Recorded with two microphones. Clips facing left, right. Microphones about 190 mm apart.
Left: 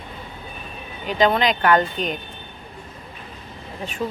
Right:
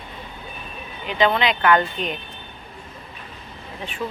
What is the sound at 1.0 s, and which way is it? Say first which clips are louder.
Speech: left 1 dB; 40° left (ahead or behind).